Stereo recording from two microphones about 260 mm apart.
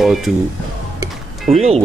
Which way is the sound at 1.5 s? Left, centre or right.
Right.